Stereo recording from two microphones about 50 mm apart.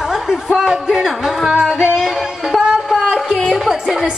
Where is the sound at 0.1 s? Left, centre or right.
Centre.